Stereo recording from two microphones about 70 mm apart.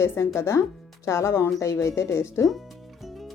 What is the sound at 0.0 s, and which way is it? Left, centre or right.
Speech, left.